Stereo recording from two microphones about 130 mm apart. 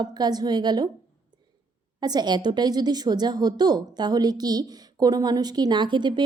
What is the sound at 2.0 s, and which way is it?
A woman's voice, 30° right (ahead or behind).